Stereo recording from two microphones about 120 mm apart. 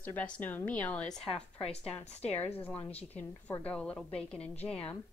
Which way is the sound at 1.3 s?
55° left (ahead or behind).